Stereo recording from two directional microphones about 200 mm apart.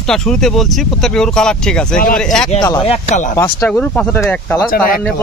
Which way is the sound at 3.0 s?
35° left (ahead or behind).